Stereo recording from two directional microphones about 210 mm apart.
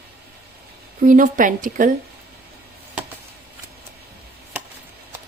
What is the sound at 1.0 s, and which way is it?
Speech, 40° right (ahead or behind).